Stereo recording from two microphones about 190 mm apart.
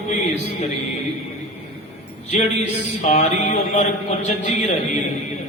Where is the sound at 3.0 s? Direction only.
40° left (ahead or behind).